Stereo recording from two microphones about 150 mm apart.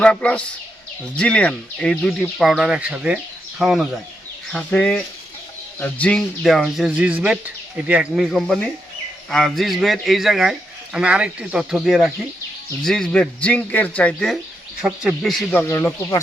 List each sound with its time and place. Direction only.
0.0 s speech: 5° left (ahead or behind)
14.8 s speech: 5° right (ahead or behind)
15.5 s speech: 15° left (ahead or behind)